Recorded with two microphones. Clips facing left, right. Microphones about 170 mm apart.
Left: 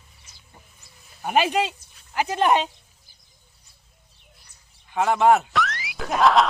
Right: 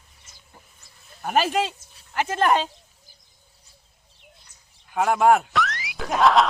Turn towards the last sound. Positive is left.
turn(degrees=0)  # may be behind; listen again after turning